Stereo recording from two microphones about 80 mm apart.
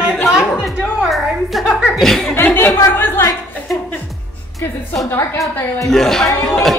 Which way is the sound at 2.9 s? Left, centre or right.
Left.